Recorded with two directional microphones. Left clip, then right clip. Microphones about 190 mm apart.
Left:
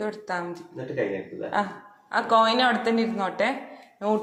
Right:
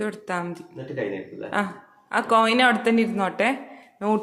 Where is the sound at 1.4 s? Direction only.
30° right (ahead or behind).